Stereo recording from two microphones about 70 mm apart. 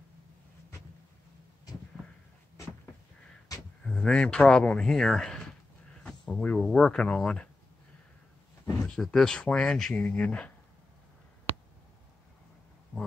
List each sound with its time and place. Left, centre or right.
3.5 s a sound: left
3.8 s speech: centre
8.8 s speech: centre